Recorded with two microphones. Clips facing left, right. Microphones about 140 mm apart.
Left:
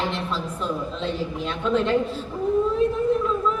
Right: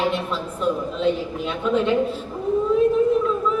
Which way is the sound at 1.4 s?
10° right (ahead or behind).